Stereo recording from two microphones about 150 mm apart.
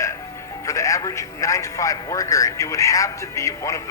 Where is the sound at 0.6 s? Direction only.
20° left (ahead or behind).